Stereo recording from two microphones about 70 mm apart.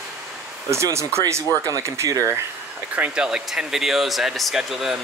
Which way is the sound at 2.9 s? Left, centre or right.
Right.